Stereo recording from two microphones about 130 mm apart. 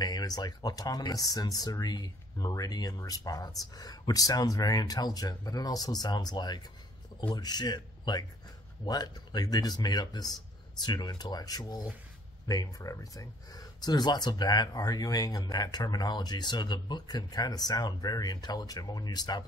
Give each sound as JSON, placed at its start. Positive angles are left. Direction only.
{"t": 0.0, "sound": "speech", "side_deg": 30}